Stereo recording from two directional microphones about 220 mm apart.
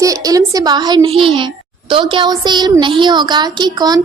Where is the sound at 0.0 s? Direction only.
15° right (ahead or behind).